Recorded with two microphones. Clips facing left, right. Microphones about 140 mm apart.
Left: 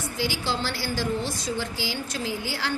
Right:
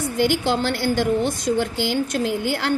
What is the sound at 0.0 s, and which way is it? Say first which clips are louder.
A woman's voice: right 9 dB; 55° right (ahead or behind).